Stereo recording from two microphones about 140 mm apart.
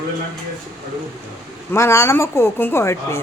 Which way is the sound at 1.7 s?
20° left (ahead or behind).